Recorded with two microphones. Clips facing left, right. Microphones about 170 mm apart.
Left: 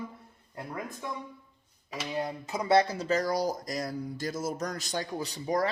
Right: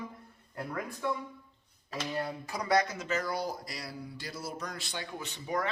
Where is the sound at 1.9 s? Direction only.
15° left (ahead or behind).